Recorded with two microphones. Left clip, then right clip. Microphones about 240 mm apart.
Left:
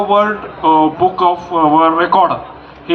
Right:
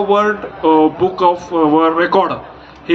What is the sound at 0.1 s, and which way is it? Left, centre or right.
A man's voice, right.